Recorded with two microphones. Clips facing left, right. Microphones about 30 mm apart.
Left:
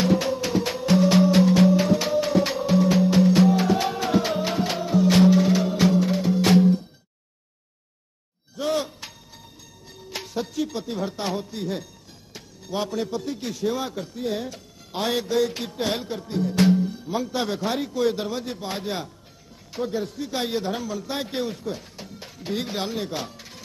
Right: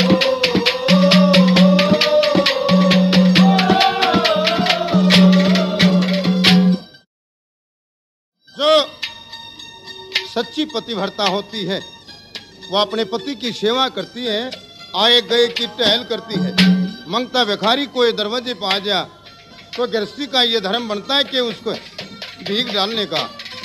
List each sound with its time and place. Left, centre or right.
0.0 s music: right
8.5 s music: right
12.4 s a man's voice: right